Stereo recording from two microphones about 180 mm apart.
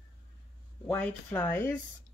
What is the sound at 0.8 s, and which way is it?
Speech, 10° left (ahead or behind).